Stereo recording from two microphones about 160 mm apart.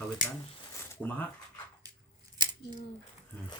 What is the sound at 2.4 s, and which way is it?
Scissors, 25° right (ahead or behind).